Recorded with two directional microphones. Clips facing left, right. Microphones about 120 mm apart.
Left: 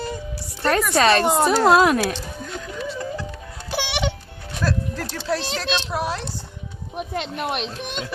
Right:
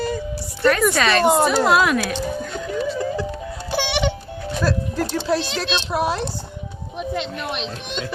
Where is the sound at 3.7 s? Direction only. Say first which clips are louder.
Right 3 dB; 10° left (ahead or behind).